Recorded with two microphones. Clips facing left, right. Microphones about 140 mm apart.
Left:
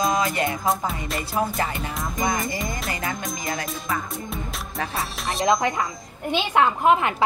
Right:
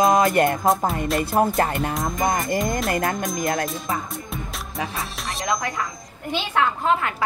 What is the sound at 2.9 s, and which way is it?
Music, 55° right (ahead or behind).